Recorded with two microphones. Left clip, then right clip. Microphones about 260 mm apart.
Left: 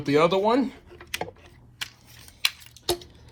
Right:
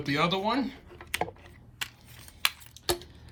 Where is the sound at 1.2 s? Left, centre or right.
Left.